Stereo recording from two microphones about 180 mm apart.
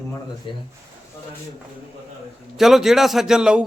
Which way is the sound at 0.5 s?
30° left (ahead or behind).